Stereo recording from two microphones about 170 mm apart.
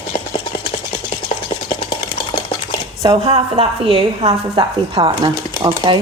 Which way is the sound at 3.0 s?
35° right (ahead or behind).